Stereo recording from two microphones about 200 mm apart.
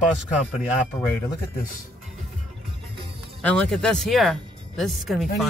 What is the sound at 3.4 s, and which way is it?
Speech, 5° left (ahead or behind).